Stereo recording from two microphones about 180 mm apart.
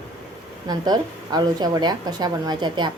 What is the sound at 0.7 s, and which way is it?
A woman's voice, 20° right (ahead or behind).